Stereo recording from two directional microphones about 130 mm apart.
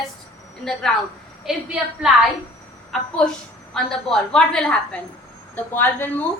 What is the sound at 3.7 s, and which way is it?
A woman's voice, 5° left (ahead or behind).